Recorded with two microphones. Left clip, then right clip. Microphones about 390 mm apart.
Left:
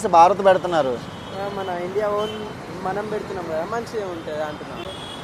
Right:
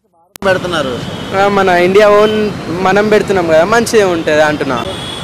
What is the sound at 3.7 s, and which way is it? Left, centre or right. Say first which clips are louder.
Speech: right 17 dB; right.